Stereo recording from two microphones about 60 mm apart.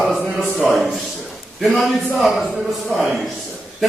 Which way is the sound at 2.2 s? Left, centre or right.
Centre.